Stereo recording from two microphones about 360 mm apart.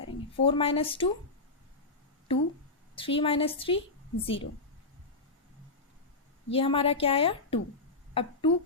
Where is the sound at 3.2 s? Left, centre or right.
Centre.